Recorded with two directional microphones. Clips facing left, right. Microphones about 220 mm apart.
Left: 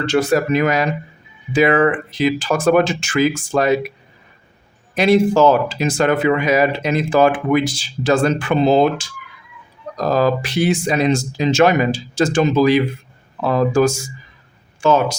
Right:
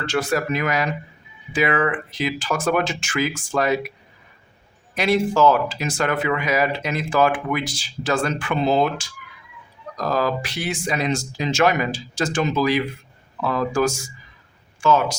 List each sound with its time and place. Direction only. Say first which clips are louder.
0.0 s speech: left 6 dB; 20° left (ahead or behind)
4.9 s speech: left 6 dB; 25° left (ahead or behind)